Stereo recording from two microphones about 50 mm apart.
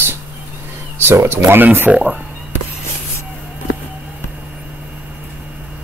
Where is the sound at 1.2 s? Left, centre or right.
Right.